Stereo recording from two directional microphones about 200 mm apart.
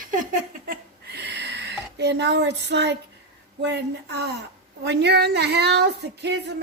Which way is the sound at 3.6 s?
55° right (ahead or behind).